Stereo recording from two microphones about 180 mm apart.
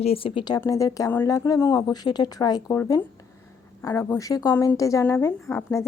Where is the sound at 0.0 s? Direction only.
30° left (ahead or behind).